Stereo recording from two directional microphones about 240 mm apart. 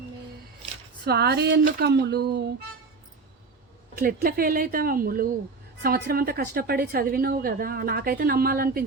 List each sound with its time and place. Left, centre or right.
1.0 s speech: right
3.9 s a woman's voice: right